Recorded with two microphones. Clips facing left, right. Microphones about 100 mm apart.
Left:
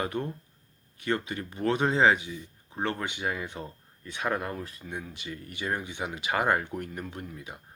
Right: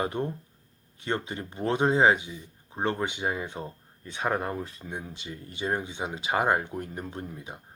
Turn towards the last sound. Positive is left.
turn(degrees=-25)  # may be behind; listen again after turning